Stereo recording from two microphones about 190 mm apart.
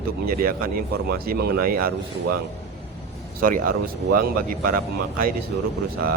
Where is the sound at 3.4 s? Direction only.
45° right (ahead or behind).